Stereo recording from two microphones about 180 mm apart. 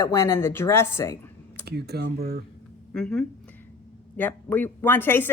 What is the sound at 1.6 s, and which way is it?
Speech, 65° right (ahead or behind).